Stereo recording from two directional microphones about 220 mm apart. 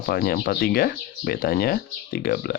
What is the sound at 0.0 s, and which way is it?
Speech, 45° left (ahead or behind).